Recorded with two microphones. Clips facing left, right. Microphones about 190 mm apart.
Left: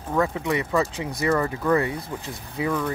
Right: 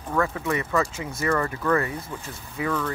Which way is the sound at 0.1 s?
15° left (ahead or behind).